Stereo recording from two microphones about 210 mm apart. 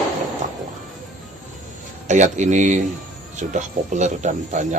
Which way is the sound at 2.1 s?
35° right (ahead or behind).